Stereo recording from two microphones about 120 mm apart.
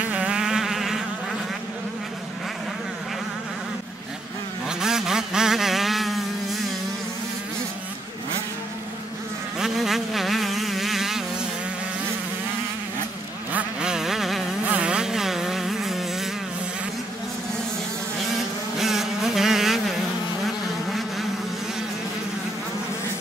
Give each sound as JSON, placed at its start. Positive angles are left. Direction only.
{"t": 0.0, "sound": "insect", "side_deg": -10}
{"t": 4.6, "sound": "vehicle", "side_deg": -5}
{"t": 9.6, "sound": "vehicle", "side_deg": 0}
{"t": 13.5, "sound": "vehicle", "side_deg": -10}
{"t": 14.7, "sound": "a sound", "side_deg": -10}
{"t": 18.8, "sound": "vehicle", "side_deg": 0}
{"t": 20.4, "sound": "insect", "side_deg": 0}